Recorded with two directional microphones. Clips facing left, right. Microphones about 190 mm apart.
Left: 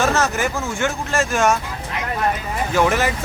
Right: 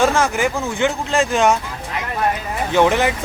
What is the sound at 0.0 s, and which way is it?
Speech, 15° right (ahead or behind).